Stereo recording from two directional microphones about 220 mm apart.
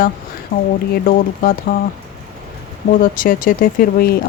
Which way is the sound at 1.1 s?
40° left (ahead or behind).